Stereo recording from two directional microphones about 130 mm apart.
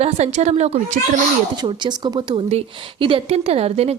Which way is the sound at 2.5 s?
45° right (ahead or behind).